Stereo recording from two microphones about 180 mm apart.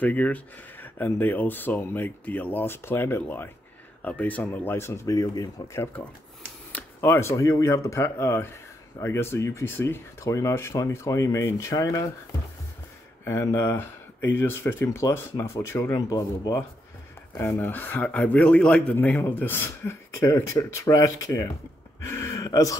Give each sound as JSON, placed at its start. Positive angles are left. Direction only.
{"t": 0.0, "sound": "a man's voice", "side_deg": 10}
{"t": 13.2, "sound": "a man's voice", "side_deg": 15}
{"t": 22.0, "sound": "a sound", "side_deg": 15}